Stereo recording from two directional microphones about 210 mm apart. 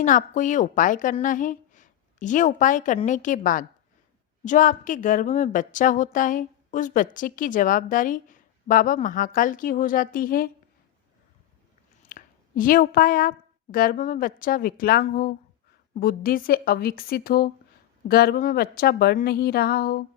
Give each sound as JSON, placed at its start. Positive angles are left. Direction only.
{"t": 0.0, "sound": "a woman's voice", "side_deg": 35}
{"t": 12.0, "sound": "a woman's voice", "side_deg": 40}